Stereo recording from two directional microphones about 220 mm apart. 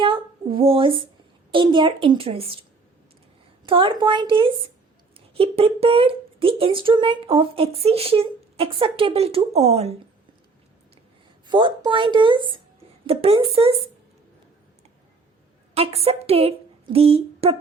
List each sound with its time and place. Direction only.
0.0 s female singing: 25° right (ahead or behind)
1.5 s speech: 20° right (ahead or behind)
3.7 s speech: 25° right (ahead or behind)
11.4 s speech: 20° right (ahead or behind)
15.7 s a woman's voice: 25° right (ahead or behind)